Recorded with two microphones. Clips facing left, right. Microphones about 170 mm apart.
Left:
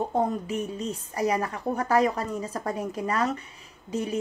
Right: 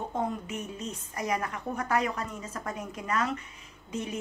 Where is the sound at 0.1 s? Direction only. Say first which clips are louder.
Left 6 dB; 35° left (ahead or behind).